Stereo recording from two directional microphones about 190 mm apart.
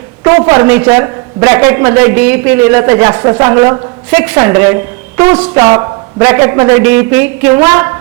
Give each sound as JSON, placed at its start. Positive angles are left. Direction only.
{"t": 0.3, "sound": "a man's voice", "side_deg": -20}